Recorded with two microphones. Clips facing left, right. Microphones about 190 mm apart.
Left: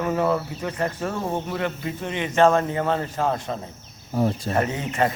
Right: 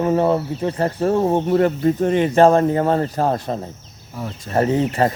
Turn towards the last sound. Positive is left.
turn(degrees=-35)  # may be behind; listen again after turning